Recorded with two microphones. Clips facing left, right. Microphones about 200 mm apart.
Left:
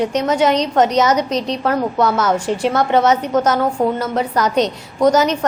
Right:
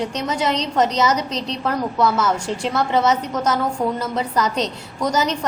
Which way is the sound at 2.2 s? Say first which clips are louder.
Left 4 dB; 35° left (ahead or behind).